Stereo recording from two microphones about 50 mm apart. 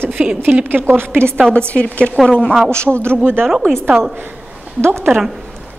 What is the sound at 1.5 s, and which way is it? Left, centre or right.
Speech, centre.